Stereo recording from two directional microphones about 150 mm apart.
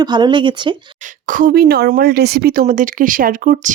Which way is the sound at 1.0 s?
65° right (ahead or behind).